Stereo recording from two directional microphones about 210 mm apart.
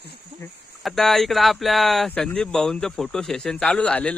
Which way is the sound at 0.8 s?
Centre (ahead or behind).